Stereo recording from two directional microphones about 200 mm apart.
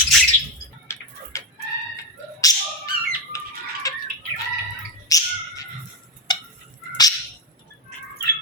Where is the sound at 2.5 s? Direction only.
20° left (ahead or behind).